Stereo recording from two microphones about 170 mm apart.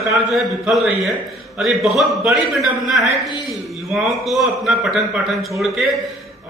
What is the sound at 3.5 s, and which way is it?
A man's voice, centre (ahead or behind).